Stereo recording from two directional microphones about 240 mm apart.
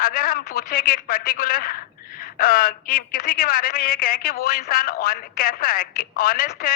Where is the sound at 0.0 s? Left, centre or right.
Left.